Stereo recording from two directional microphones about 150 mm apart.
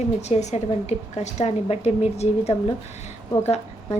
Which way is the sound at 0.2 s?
50° left (ahead or behind).